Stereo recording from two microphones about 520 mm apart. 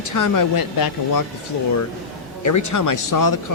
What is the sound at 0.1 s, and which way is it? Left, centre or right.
Speech, left.